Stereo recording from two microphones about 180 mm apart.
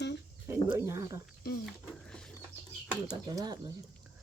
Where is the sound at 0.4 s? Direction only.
15° right (ahead or behind).